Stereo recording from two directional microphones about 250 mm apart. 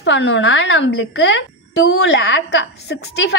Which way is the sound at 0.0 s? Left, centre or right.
Left.